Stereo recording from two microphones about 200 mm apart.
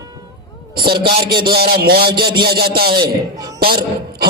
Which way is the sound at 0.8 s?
50° right (ahead or behind).